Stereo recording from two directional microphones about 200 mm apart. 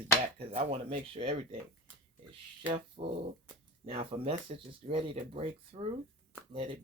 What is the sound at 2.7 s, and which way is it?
Speech, 30° right (ahead or behind).